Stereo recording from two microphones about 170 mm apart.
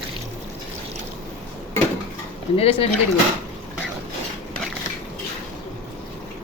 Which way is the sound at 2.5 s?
35° left (ahead or behind).